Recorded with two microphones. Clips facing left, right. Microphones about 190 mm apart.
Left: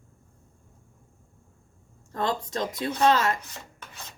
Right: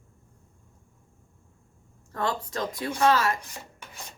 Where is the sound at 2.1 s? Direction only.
20° left (ahead or behind).